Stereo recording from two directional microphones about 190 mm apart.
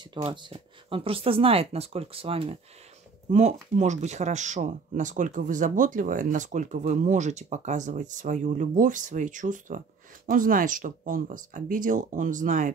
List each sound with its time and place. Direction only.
0.1 s speech: 25° right (ahead or behind); by 12.7 s 40° right (ahead or behind)